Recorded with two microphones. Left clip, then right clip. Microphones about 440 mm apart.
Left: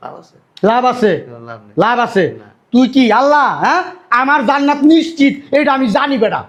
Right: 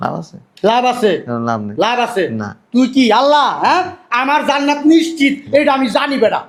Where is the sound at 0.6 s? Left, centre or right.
Left.